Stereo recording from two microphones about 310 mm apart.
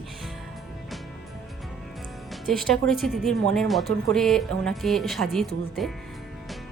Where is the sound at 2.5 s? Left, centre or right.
Centre.